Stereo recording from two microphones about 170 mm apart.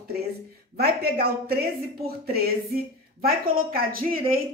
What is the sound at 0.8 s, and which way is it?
Speech, 65° right (ahead or behind).